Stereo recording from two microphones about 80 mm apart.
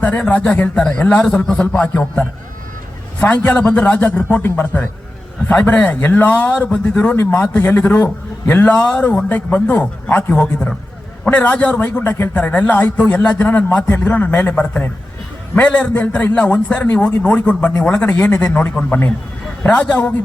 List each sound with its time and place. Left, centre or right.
0.0 s a man's voice: centre
10.4 s a man's voice: centre